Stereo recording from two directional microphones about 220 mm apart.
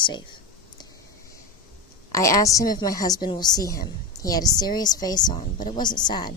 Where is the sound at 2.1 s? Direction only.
15° left (ahead or behind).